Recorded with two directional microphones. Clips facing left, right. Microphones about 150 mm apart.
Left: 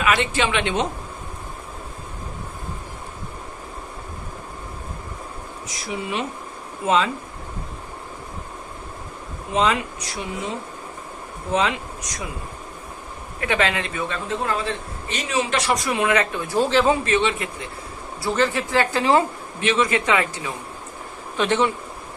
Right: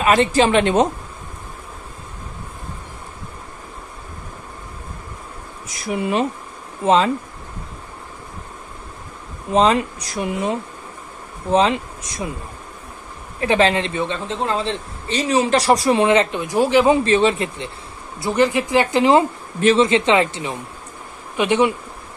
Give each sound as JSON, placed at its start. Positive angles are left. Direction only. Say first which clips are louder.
{"t": 0.0, "sound": "speech", "louder": "right 6 dB", "side_deg": -40}
{"t": 5.7, "sound": "speech", "louder": "right 7 dB", "side_deg": -50}
{"t": 6.8, "sound": "speech", "louder": "right 4 dB", "side_deg": -30}
{"t": 9.5, "sound": "speech", "louder": "right 5 dB", "side_deg": -35}
{"t": 11.5, "sound": "a man's voice", "louder": "right 6 dB", "side_deg": -30}
{"t": 13.4, "sound": "a man's voice", "louder": "right 6 dB", "side_deg": -30}
{"t": 17.0, "sound": "speech", "louder": "right 5 dB", "side_deg": -35}
{"t": 18.2, "sound": "a man's voice", "louder": "right 4 dB", "side_deg": -15}
{"t": 21.4, "sound": "speech", "louder": "right 3 dB", "side_deg": -15}